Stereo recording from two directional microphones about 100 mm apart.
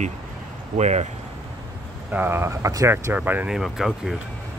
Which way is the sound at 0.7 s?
90° right.